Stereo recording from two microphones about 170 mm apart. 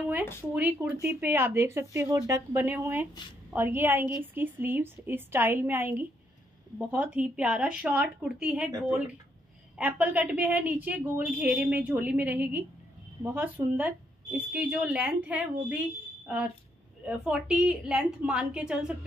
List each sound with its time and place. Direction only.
0.0 s a sound: 10° right (ahead or behind)
0.5 s a woman's voice: 10° right (ahead or behind)
9.8 s a woman's voice: 10° right (ahead or behind)
17.0 s a woman's voice: 5° right (ahead or behind)